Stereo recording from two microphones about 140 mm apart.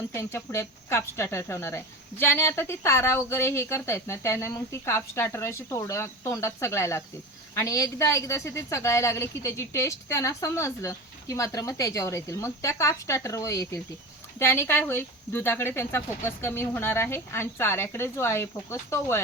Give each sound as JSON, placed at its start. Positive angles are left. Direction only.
{"t": 0.1, "sound": "speech", "side_deg": 20}